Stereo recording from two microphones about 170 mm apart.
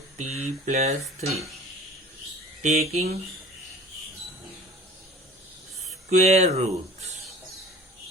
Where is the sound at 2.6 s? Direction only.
45° right (ahead or behind).